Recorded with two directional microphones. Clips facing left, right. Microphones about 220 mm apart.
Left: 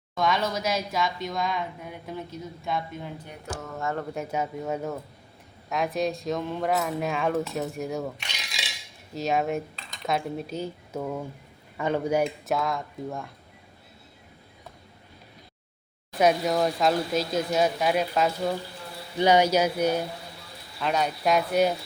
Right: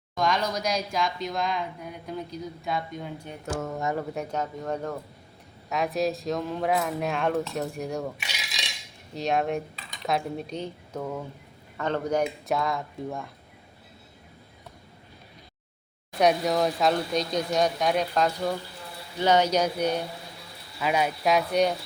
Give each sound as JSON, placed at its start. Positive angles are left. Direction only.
{"t": 0.2, "sound": "speech", "side_deg": 5}
{"t": 3.8, "sound": "speech", "side_deg": -15}
{"t": 4.1, "sound": "speech", "side_deg": 5}
{"t": 7.5, "sound": "cutlery", "side_deg": 0}
{"t": 9.1, "sound": "speech", "side_deg": 0}
{"t": 16.1, "sound": "speech", "side_deg": 0}
{"t": 20.7, "sound": "speech", "side_deg": -5}